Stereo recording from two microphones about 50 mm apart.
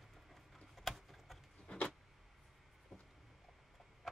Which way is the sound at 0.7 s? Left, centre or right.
Centre.